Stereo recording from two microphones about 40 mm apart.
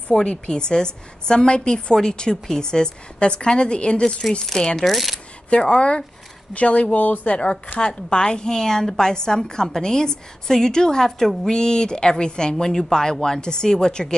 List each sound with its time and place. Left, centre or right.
0.1 s a woman's voice: left
4.8 s speech: centre
5.5 s a woman's voice: left